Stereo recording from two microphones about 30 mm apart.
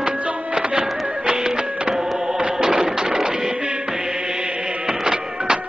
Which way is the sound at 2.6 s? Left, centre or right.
Right.